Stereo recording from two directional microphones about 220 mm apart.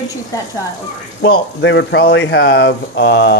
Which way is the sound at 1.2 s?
55° left (ahead or behind).